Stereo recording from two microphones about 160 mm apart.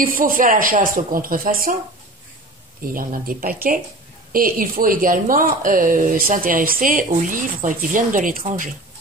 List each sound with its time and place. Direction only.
0.0 s speech: 60° right (ahead or behind)
2.9 s speech: 60° right (ahead or behind)